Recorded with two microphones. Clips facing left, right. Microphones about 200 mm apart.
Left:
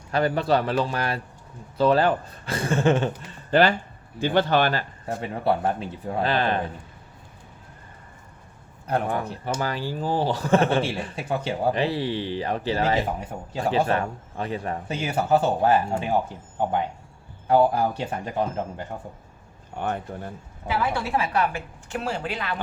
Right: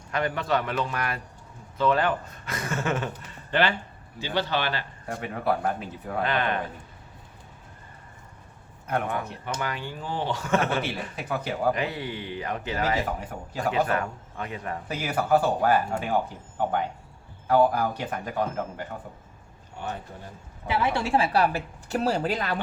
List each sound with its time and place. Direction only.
0.1 s speech: 35° left (ahead or behind)
3.5 s speech: 40° left (ahead or behind)
4.2 s a man's voice: 50° left (ahead or behind)
5.0 s a man's voice: 30° left (ahead or behind)
8.9 s a man's voice: 35° left (ahead or behind)
17.5 s a man's voice: 25° left (ahead or behind)
19.7 s speech: 60° left (ahead or behind)
20.7 s a woman's voice: 25° right (ahead or behind)